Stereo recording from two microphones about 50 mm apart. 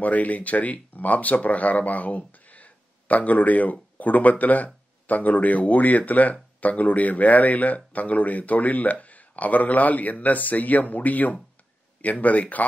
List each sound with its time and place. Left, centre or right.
0.0 s speech: left